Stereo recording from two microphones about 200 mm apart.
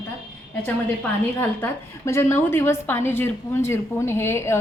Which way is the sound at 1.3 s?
10° left (ahead or behind).